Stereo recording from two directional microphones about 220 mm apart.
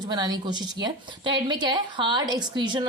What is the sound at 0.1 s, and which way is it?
A woman's voice, 20° right (ahead or behind).